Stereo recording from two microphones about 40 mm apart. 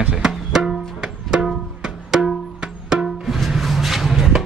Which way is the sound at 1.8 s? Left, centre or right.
Centre.